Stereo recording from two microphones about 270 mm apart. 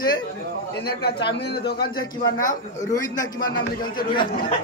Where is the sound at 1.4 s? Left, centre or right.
Left.